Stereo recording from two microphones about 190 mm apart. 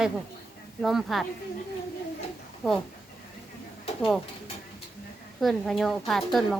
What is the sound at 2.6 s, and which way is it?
Speech, centre (ahead or behind).